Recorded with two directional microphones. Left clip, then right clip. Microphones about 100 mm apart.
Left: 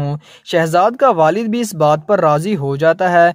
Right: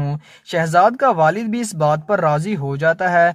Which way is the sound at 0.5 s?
35° left (ahead or behind).